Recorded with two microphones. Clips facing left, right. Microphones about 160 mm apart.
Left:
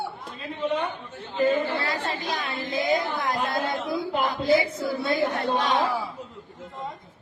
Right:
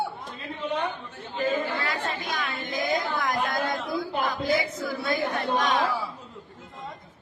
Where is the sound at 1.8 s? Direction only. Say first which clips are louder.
Left 1 dB; 35° left (ahead or behind).